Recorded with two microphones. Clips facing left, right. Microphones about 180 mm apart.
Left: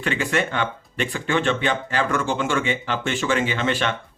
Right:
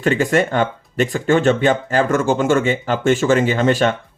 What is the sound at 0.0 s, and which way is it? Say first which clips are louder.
Speech: right 7 dB; 45° right (ahead or behind).